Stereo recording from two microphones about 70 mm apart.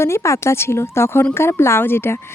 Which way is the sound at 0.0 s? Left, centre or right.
Left.